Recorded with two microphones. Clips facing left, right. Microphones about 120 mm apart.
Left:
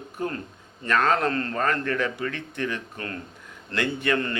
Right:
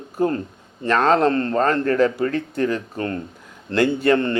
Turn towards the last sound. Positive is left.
turn(degrees=-30)  # may be behind; listen again after turning